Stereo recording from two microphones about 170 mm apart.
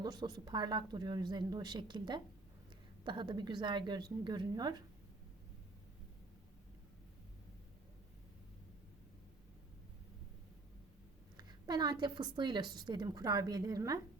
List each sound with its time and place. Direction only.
0.0 s a woman's voice: 25° right (ahead or behind)
11.3 s a woman's voice: 25° right (ahead or behind)